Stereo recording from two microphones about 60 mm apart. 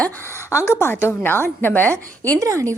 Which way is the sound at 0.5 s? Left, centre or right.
Left.